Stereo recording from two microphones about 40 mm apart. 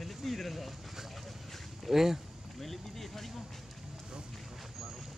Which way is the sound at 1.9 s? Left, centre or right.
Centre.